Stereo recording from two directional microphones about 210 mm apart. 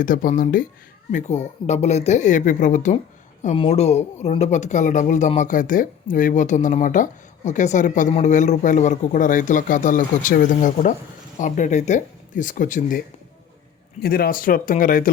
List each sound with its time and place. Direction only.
0.0 s speech: 40° left (ahead or behind)
14.0 s speech: 45° left (ahead or behind)